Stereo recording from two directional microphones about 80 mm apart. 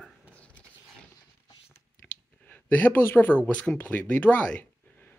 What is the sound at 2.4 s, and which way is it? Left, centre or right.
Speech, left.